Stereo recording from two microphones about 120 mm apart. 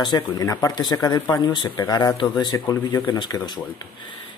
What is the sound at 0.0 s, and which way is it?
Speech, 35° left (ahead or behind).